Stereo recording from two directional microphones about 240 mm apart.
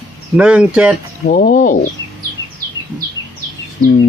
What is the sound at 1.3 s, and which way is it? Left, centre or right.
Speech, left.